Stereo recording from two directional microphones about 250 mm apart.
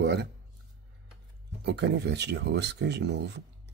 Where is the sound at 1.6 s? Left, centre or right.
Right.